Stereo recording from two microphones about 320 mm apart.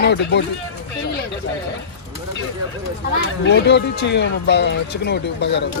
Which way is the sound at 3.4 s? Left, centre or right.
Left.